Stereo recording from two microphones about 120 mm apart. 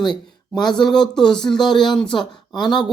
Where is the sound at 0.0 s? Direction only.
5° left (ahead or behind).